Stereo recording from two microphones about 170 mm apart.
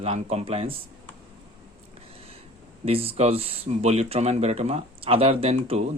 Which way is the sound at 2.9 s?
35° right (ahead or behind).